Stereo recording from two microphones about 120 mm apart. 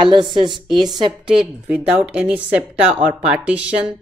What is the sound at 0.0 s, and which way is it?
Speech, 40° right (ahead or behind).